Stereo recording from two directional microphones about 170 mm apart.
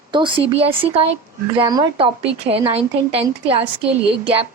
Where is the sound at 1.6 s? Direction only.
25° right (ahead or behind).